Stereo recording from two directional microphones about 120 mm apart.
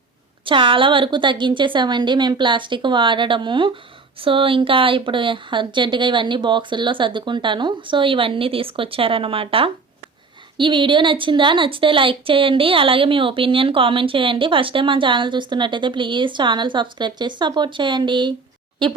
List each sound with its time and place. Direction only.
0.4 s a woman's voice: 45° right (ahead or behind)